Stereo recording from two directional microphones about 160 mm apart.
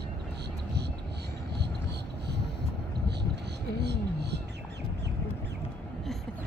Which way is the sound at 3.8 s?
90° right.